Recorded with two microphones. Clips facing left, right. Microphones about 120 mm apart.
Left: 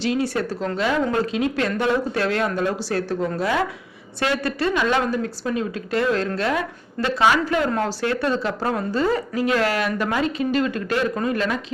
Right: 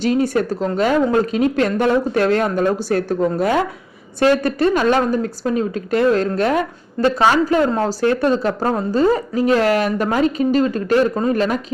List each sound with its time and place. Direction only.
0.0 s a woman's voice: 45° right (ahead or behind)